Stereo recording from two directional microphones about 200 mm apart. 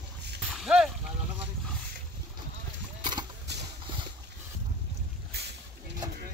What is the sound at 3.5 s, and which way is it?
Clip-clop, 60° right (ahead or behind).